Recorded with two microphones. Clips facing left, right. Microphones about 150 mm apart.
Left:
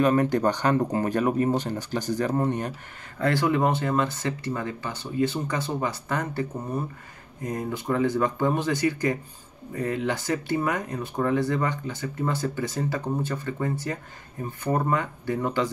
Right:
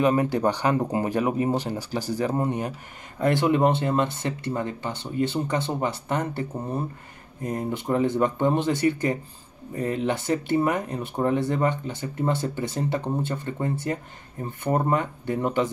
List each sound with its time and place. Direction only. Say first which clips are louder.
0.0 s speech: even; 10° right (ahead or behind)